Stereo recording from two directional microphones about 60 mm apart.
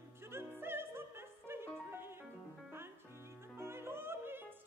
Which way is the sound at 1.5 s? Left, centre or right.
Right.